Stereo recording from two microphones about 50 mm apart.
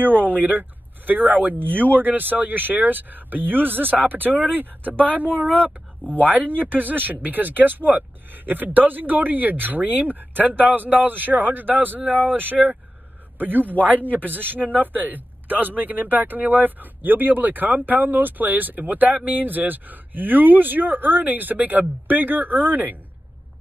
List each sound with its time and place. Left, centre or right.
0.0 s speech: right